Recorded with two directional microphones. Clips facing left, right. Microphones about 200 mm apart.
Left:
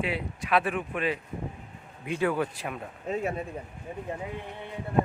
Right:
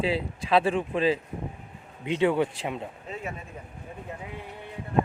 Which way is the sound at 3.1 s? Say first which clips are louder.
Left 8 dB; 40° left (ahead or behind).